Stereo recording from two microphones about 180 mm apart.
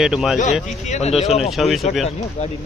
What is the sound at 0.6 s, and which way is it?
Speech, 40° left (ahead or behind).